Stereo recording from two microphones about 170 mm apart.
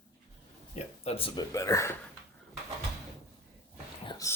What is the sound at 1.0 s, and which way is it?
Speech, 35° left (ahead or behind).